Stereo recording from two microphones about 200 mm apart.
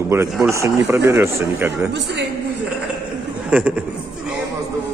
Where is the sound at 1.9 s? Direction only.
60° right (ahead or behind).